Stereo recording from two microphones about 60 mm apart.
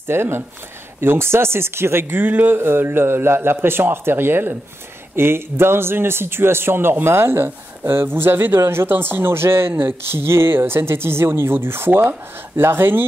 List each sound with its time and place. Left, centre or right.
0.1 s a man's voice: right